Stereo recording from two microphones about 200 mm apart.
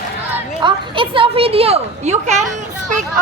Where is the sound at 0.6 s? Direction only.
25° right (ahead or behind).